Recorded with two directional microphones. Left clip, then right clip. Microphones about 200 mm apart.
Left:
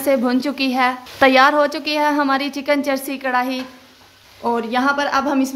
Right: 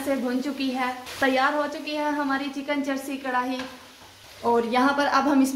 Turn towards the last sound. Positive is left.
turn(degrees=25)  # may be behind; listen again after turning